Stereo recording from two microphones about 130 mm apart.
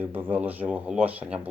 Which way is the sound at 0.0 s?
15° right (ahead or behind).